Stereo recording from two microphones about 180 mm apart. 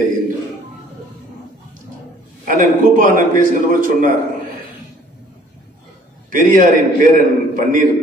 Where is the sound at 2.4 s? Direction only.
45° right (ahead or behind).